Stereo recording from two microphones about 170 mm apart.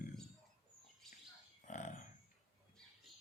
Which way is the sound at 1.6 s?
45° left (ahead or behind).